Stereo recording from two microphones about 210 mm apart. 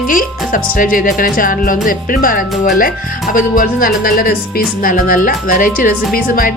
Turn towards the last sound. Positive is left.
turn(degrees=40)  # may be behind; listen again after turning